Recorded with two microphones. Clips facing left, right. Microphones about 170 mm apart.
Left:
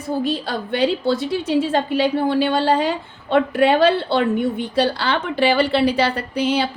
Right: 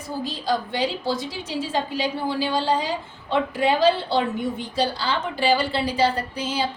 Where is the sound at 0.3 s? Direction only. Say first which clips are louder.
Left 3 dB; 60° left (ahead or behind).